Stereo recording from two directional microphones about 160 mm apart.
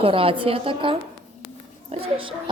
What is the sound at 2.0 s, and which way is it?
Speech, 35° right (ahead or behind).